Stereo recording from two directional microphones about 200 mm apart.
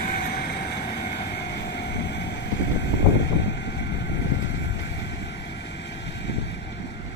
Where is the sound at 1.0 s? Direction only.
55° left (ahead or behind).